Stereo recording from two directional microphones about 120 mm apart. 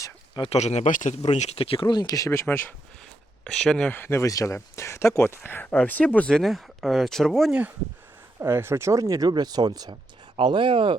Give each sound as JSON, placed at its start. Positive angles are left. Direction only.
{"t": 0.4, "sound": "speech", "side_deg": 65}
{"t": 1.3, "sound": "speech", "side_deg": 65}
{"t": 3.4, "sound": "speech", "side_deg": 5}
{"t": 3.9, "sound": "speech", "side_deg": 20}
{"t": 8.4, "sound": "speech", "side_deg": -20}